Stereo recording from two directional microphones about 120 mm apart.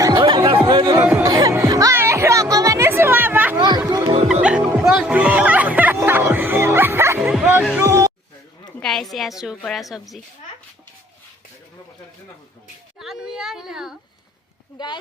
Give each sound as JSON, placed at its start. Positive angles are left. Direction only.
{"t": 0.0, "sound": "chatter", "side_deg": -40}
{"t": 0.6, "sound": "music", "side_deg": -35}
{"t": 0.9, "sound": "speech", "side_deg": -15}
{"t": 1.2, "sound": "music", "side_deg": -30}
{"t": 3.8, "sound": "music", "side_deg": -30}
{"t": 4.3, "sound": "music", "side_deg": -10}
{"t": 8.8, "sound": "a woman's voice", "side_deg": 5}
{"t": 13.0, "sound": "a woman's voice", "side_deg": -5}